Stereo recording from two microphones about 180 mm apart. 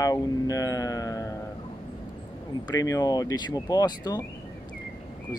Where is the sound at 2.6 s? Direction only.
20° left (ahead or behind).